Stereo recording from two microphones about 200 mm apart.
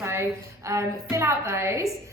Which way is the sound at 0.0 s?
15° right (ahead or behind).